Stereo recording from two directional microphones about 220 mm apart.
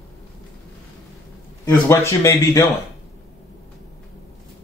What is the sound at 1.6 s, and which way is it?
Speech, 15° left (ahead or behind).